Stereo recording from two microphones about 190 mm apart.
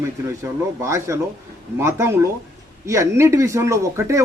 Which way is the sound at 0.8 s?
15° right (ahead or behind).